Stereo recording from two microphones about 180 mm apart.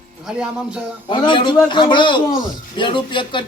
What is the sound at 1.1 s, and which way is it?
A man's voice, 25° left (ahead or behind).